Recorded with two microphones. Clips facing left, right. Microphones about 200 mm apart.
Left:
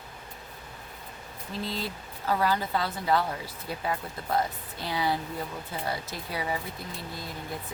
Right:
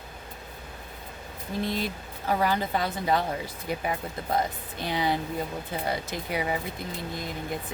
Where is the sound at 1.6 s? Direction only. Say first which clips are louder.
Right 4 dB; 15° right (ahead or behind).